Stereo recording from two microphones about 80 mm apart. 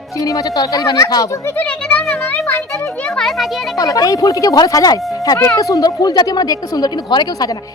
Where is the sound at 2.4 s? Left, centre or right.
Left.